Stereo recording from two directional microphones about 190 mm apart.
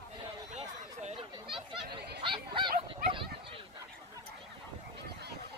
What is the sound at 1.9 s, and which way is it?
Chatter, 60° right (ahead or behind).